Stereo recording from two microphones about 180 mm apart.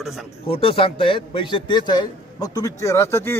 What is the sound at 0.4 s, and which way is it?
A man's voice, 30° left (ahead or behind).